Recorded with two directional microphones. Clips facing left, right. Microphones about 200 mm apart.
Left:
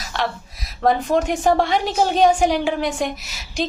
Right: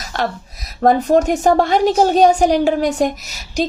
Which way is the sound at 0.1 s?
45° right (ahead or behind).